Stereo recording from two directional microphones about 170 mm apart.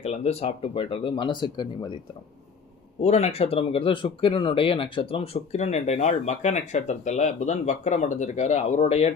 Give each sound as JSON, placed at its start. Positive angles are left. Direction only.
{"t": 0.0, "sound": "speech", "side_deg": 40}
{"t": 3.0, "sound": "speech", "side_deg": 40}